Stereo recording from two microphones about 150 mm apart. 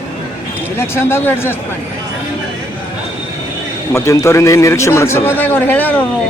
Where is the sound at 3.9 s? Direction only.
20° left (ahead or behind).